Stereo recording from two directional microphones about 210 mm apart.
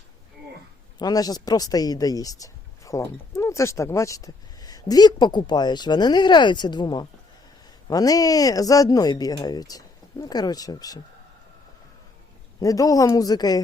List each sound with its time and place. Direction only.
0.9 s speech: 20° left (ahead or behind)
12.5 s speech: 15° left (ahead or behind)